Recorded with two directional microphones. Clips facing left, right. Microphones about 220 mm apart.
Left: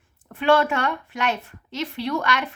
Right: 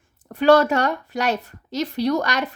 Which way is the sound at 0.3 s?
40° right (ahead or behind).